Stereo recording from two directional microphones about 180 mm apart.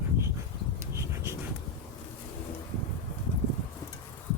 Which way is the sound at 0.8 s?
15° right (ahead or behind).